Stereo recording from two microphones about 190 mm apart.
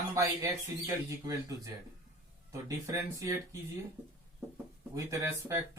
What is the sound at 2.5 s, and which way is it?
Speech, 15° right (ahead or behind).